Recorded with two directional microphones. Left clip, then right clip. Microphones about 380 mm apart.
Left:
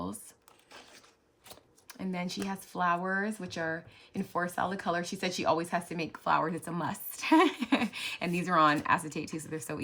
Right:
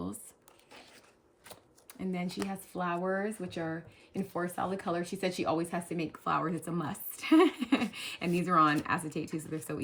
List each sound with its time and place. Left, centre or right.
2.0 s speech: centre